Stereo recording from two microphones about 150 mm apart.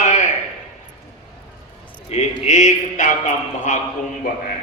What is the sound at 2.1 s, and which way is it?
A man's voice, 45° left (ahead or behind).